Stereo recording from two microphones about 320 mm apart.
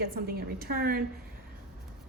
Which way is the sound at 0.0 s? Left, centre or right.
Right.